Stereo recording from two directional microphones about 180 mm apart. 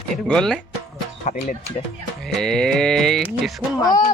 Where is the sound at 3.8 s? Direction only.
20° left (ahead or behind).